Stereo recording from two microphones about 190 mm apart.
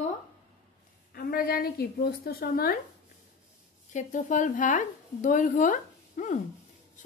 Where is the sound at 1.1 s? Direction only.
50° left (ahead or behind).